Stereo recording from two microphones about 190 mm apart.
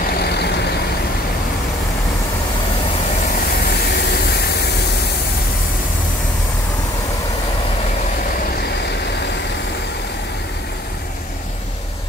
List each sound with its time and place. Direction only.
0.2 s vehicle: 60° left (ahead or behind)
3.9 s vehicle: 60° left (ahead or behind)